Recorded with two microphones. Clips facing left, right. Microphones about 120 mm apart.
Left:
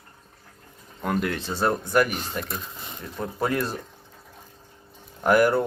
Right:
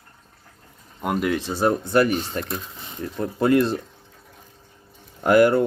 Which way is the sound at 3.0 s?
45° right (ahead or behind).